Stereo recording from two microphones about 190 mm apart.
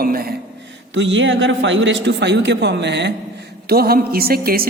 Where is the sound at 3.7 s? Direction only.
55° right (ahead or behind).